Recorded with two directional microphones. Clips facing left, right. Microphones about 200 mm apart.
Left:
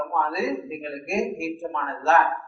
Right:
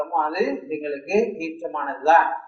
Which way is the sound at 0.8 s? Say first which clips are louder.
Right 6 dB; 30° right (ahead or behind).